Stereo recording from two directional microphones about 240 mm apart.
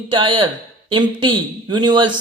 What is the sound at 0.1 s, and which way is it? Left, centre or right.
Speech, right.